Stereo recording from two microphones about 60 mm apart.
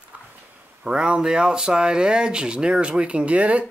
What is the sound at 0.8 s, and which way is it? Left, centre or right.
Speech, centre.